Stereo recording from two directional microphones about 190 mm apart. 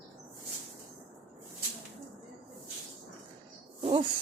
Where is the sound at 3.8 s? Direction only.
30° right (ahead or behind).